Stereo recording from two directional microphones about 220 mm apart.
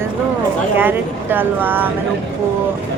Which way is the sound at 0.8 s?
10° right (ahead or behind).